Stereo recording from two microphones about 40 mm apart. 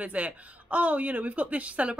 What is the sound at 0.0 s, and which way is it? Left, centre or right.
A woman's voice, right.